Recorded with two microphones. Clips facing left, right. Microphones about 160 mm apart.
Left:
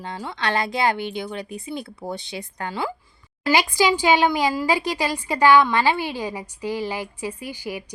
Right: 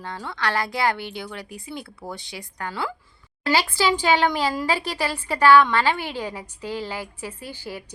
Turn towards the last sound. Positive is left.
turn(degrees=15)  # may be behind; listen again after turning